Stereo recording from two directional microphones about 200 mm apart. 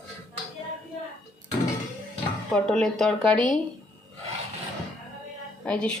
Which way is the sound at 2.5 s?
5° left (ahead or behind).